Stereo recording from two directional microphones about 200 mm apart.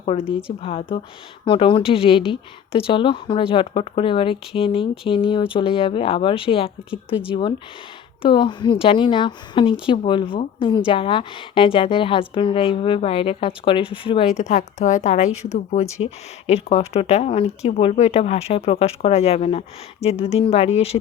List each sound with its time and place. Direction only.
0.0 s speech: 30° left (ahead or behind)
8.2 s speech: 25° left (ahead or behind)